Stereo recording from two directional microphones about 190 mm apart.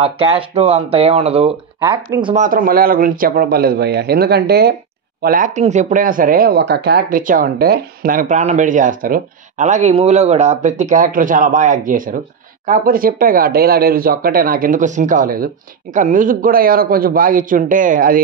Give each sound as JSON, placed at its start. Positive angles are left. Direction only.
{"t": 0.0, "sound": "speech", "side_deg": -30}
{"t": 2.3, "sound": "a woman's voice", "side_deg": -45}
{"t": 5.2, "sound": "a woman's voice", "side_deg": -45}